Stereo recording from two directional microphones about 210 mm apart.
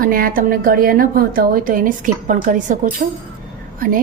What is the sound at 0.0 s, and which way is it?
A woman's voice, 40° right (ahead or behind).